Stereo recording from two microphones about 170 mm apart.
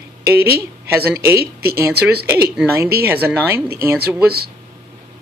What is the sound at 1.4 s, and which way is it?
Speech, 65° right (ahead or behind).